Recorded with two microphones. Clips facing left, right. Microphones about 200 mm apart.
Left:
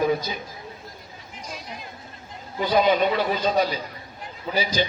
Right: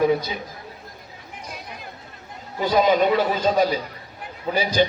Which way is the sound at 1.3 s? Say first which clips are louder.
Even; 60° right (ahead or behind).